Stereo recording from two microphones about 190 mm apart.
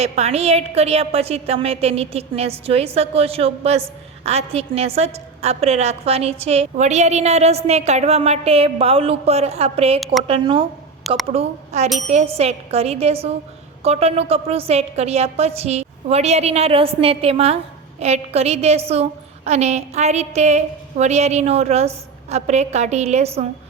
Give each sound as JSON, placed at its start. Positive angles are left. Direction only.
{"t": 0.0, "sound": "a woman's voice", "side_deg": -35}